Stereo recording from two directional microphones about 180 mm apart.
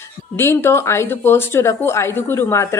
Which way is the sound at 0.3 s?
15° left (ahead or behind).